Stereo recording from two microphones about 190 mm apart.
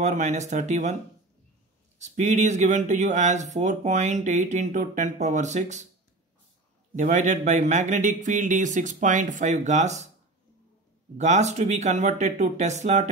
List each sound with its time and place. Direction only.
0.0 s speech: 40° right (ahead or behind)
2.0 s speech: 40° right (ahead or behind)
7.0 s speech: 40° right (ahead or behind)
11.1 s speech: 35° right (ahead or behind)